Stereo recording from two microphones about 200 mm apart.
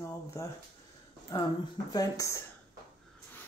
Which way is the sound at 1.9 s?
15° left (ahead or behind).